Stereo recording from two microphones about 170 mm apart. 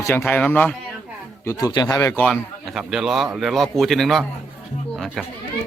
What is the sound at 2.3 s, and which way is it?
A man's voice, centre (ahead or behind).